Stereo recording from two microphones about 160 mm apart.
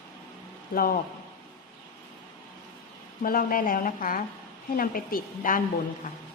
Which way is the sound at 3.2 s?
65° left (ahead or behind).